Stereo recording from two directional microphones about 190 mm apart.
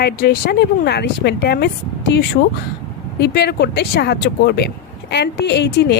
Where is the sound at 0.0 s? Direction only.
55° left (ahead or behind).